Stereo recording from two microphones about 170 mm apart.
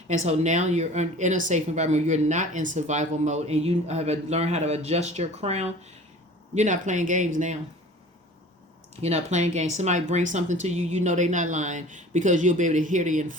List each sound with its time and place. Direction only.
0.1 s speech: 45° right (ahead or behind)
9.0 s speech: 40° right (ahead or behind)